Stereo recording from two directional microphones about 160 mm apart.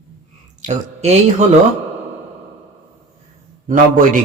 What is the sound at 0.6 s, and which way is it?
Speech, 50° right (ahead or behind).